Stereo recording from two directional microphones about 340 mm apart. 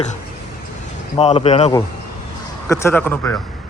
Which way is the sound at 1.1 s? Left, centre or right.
Centre.